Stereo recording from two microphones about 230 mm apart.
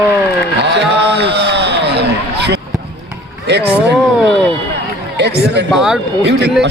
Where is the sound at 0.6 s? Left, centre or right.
Right.